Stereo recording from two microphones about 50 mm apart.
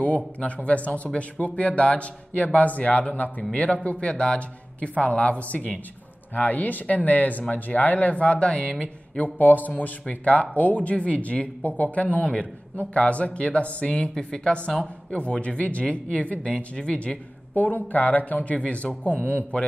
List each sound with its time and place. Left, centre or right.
0.0 s speech: left
9.2 s speech: left; by 17.2 s centre
17.6 s speech: left